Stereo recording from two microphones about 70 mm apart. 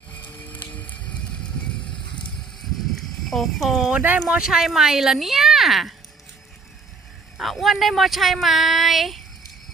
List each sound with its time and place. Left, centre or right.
0.3 s vehicle: left
2.9 s a sound: centre
3.9 s speech: right
4.3 s speech: centre
7.3 s speech: centre